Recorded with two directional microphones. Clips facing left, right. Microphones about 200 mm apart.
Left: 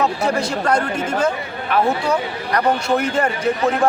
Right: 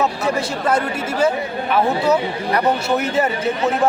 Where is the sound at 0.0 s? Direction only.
5° right (ahead or behind).